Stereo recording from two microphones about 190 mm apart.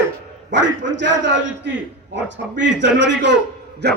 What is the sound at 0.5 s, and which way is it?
A man's voice, 70° right (ahead or behind).